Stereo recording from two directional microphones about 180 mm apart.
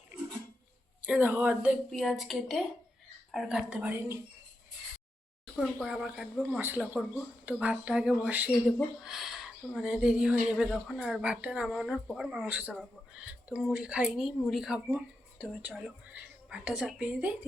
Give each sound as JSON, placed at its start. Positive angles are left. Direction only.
{"t": 1.0, "sound": "a woman's voice", "side_deg": -10}
{"t": 5.5, "sound": "a woman's voice", "side_deg": 0}